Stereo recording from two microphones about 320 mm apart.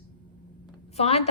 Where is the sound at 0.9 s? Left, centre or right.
Centre.